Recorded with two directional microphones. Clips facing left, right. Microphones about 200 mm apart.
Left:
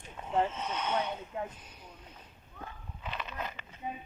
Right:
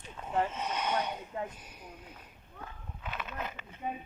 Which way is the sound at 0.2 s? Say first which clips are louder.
Even; 20° left (ahead or behind).